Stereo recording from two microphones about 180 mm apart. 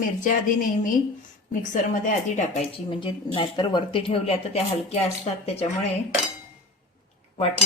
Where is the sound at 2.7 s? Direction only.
30° left (ahead or behind).